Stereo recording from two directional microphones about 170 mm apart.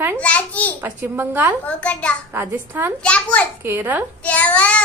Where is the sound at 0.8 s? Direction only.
10° right (ahead or behind).